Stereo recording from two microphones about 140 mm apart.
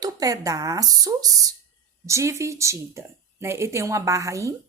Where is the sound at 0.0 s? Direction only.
25° right (ahead or behind).